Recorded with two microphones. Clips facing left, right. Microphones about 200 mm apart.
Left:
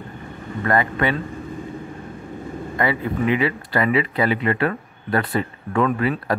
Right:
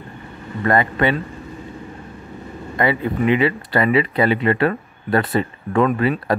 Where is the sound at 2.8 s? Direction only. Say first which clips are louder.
Right 3 dB; 25° right (ahead or behind).